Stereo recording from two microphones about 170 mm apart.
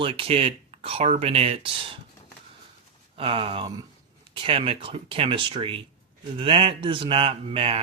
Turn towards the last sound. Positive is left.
turn(degrees=-35)  # may be behind; listen again after turning